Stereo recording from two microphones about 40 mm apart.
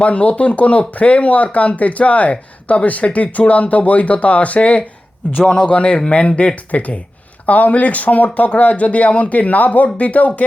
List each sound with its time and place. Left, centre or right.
0.0 s speech: left